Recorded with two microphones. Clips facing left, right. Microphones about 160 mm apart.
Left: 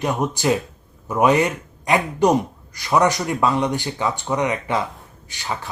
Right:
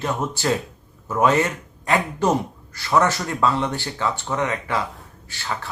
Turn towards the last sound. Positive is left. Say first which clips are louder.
# left 1 dB
turn(degrees=15)  # may be behind; listen again after turning